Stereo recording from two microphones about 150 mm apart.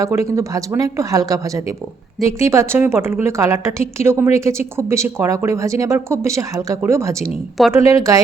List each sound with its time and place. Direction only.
0.0 s a woman's voice: 20° right (ahead or behind)